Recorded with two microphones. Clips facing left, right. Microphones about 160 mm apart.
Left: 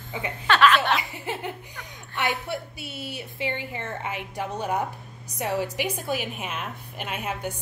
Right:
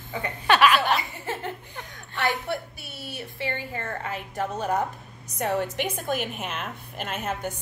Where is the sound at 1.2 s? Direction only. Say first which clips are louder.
Even; 15° left (ahead or behind).